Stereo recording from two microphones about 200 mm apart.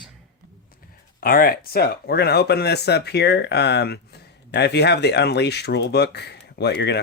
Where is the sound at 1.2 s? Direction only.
45° left (ahead or behind).